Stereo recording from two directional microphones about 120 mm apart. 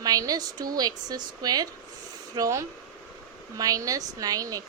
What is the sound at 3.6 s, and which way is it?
A woman's voice, 30° right (ahead or behind).